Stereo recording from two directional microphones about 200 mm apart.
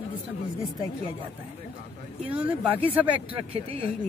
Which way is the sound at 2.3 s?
10° right (ahead or behind).